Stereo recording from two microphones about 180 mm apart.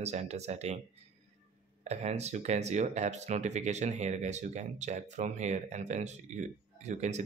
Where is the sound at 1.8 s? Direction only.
40° right (ahead or behind).